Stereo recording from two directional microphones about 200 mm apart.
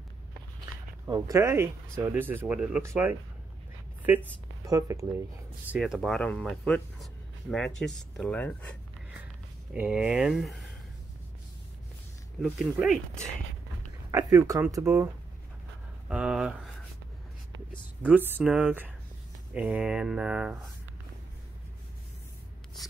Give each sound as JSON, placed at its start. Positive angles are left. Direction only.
{"t": 1.0, "sound": "speech", "side_deg": -15}
{"t": 4.3, "sound": "speech", "side_deg": -15}
{"t": 5.7, "sound": "speech", "side_deg": 0}
{"t": 9.8, "sound": "speech", "side_deg": -5}
{"t": 12.4, "sound": "speech", "side_deg": 0}
{"t": 14.1, "sound": "speech", "side_deg": -15}
{"t": 16.1, "sound": "speech", "side_deg": -5}
{"t": 18.0, "sound": "speech", "side_deg": -5}